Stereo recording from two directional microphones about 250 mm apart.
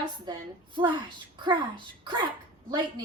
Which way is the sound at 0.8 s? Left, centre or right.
Centre.